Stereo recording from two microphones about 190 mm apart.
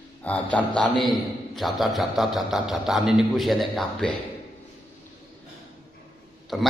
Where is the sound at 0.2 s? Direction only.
5° left (ahead or behind).